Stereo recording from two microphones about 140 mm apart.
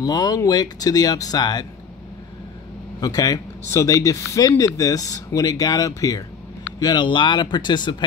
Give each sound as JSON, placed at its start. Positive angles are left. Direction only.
{"t": 0.0, "sound": "speech", "side_deg": 30}
{"t": 3.0, "sound": "speech", "side_deg": 25}